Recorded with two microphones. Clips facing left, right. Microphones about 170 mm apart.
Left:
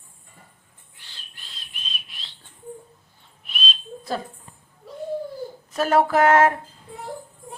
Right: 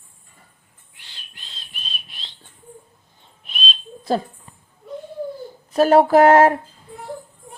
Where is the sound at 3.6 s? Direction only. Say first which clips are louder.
Right 1 dB; 25° right (ahead or behind).